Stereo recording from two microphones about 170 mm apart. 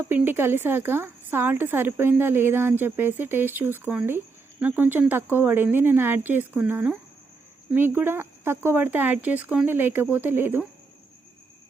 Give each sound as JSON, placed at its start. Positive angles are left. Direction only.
{"t": 0.0, "sound": "a woman's voice", "side_deg": -10}